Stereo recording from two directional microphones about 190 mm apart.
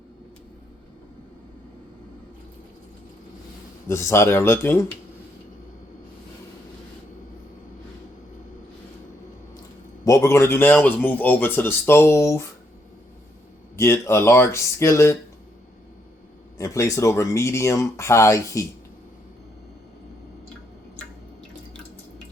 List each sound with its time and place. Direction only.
3.8 s a man's voice: 15° left (ahead or behind)
10.0 s a man's voice: 15° left (ahead or behind)
13.7 s a man's voice: 15° left (ahead or behind)
16.6 s a man's voice: 15° left (ahead or behind)